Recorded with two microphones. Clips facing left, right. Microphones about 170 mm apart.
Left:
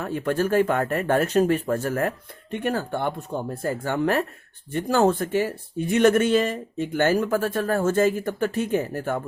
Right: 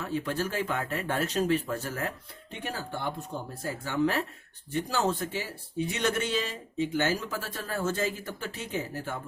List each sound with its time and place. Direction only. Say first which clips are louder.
0.0 s speech: left 7 dB; 55° left (ahead or behind)